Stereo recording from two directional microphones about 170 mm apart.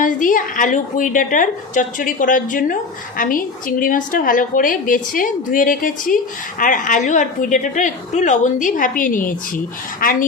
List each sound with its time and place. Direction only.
0.0 s a woman's voice: 50° left (ahead or behind)